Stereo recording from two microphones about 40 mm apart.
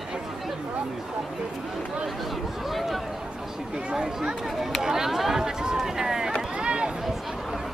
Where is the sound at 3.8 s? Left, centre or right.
Centre.